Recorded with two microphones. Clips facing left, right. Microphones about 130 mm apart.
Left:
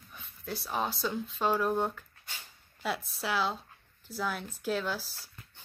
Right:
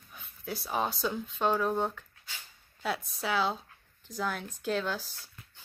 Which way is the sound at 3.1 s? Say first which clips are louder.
Right 2 dB; centre (ahead or behind).